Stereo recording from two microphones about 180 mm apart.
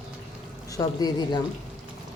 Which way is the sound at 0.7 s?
20° left (ahead or behind).